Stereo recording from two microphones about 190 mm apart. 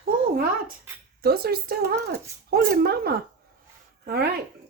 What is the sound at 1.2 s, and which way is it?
Speech, 55° right (ahead or behind).